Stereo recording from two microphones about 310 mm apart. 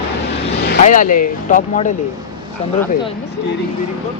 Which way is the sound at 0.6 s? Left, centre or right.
Left.